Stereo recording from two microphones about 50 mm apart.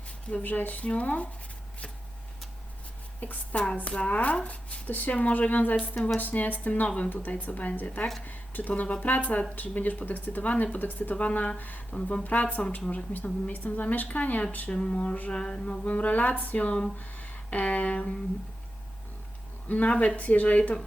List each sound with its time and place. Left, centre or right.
0.4 s speech: left
3.2 s a woman's voice: left
14.7 s speech: centre
15.3 s speech: centre
17.0 s a sound: left
19.6 s speech: left